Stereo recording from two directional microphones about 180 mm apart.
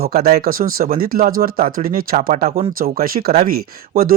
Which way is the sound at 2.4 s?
35° right (ahead or behind).